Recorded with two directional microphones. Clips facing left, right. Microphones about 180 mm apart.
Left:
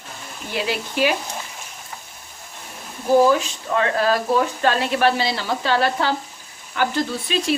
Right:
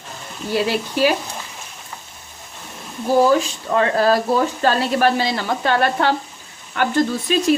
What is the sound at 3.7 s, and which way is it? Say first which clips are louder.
Speech: right 3 dB; 35° right (ahead or behind).